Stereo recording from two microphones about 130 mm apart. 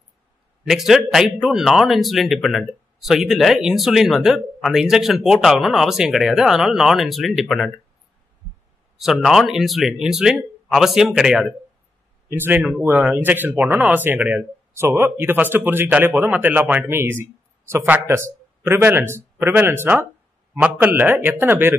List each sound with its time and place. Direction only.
0.7 s speech: centre (ahead or behind)
8.9 s speech: centre (ahead or behind)
12.3 s speech: 15° right (ahead or behind)